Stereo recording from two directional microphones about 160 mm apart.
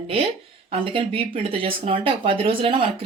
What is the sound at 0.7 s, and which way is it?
Speech, 35° right (ahead or behind).